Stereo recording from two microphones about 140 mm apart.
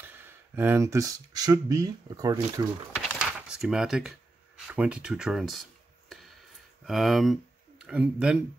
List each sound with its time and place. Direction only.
0.0 s speech: 15° right (ahead or behind)
3.2 s a sound: 5° right (ahead or behind)
6.8 s speech: centre (ahead or behind)